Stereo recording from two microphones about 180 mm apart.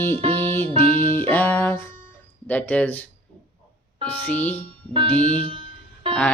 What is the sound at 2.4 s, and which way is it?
Speech, 10° left (ahead or behind).